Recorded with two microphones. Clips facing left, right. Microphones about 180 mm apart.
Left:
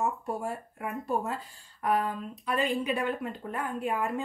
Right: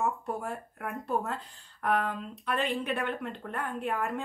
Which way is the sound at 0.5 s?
5° left (ahead or behind).